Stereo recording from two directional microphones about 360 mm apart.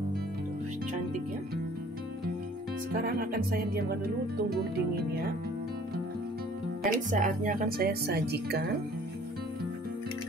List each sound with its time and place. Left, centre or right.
2.9 s speech: right
6.8 s speech: right